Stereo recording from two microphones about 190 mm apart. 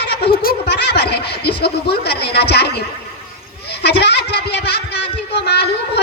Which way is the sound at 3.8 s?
65° left (ahead or behind).